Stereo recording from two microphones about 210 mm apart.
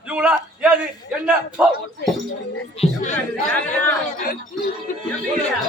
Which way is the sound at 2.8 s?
35° left (ahead or behind).